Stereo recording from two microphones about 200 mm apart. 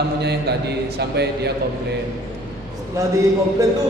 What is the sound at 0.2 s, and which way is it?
A man's voice, 55° right (ahead or behind).